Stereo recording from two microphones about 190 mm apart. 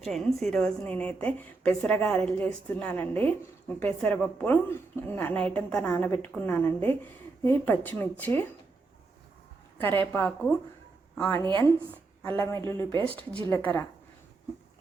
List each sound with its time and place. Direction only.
0.0 s a woman's voice: centre (ahead or behind)
9.7 s a woman's voice: 10° left (ahead or behind)